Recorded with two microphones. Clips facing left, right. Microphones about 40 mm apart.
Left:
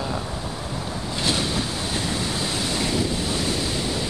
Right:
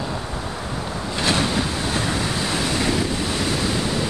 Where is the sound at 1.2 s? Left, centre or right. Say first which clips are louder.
Right 4 dB; right.